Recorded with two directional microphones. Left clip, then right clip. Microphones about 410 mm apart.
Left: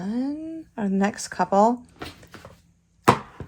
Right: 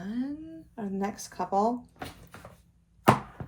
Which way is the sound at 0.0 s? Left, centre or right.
Centre.